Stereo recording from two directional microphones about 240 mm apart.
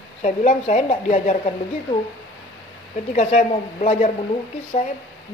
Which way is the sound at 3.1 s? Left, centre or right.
Left.